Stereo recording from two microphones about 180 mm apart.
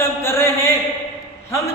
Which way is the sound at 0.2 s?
15° left (ahead or behind).